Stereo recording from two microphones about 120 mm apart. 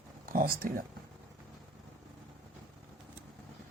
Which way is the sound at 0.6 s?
90° right.